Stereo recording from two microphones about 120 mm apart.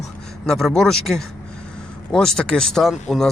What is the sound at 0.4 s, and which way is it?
Speech, 5° left (ahead or behind).